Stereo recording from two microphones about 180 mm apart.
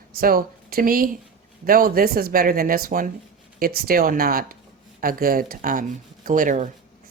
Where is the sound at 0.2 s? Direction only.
55° right (ahead or behind).